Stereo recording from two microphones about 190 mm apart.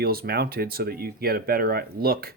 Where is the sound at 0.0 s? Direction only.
55° right (ahead or behind).